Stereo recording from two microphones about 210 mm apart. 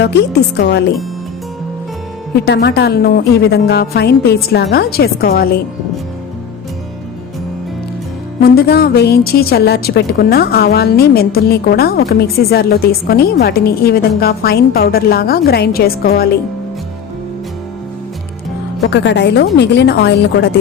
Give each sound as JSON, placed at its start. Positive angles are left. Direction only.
{"t": 0.0, "sound": "a woman's voice", "side_deg": 50}
{"t": 2.4, "sound": "a woman's voice", "side_deg": 50}
{"t": 8.4, "sound": "a woman's voice", "side_deg": 45}
{"t": 18.9, "sound": "a woman's voice", "side_deg": 55}